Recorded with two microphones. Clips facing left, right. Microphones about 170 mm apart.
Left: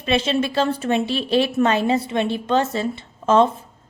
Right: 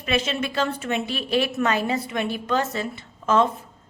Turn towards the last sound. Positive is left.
turn(degrees=30)  # may be behind; listen again after turning